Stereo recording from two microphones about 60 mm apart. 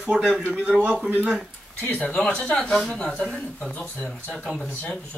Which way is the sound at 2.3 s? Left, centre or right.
Centre.